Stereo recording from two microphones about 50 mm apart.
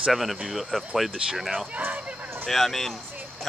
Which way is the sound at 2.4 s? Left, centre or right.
Centre.